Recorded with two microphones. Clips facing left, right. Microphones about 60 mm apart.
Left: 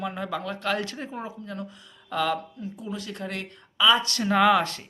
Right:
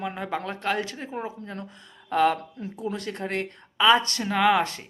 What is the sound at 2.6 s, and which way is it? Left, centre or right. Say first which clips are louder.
Speech: right 3 dB; right.